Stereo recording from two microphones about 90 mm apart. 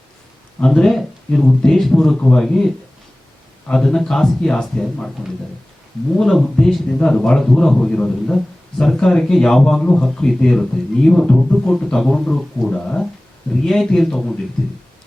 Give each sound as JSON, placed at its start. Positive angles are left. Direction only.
{"t": 0.6, "sound": "a man's voice", "side_deg": 10}
{"t": 3.7, "sound": "speech", "side_deg": 5}
{"t": 6.1, "sound": "a man's voice", "side_deg": 5}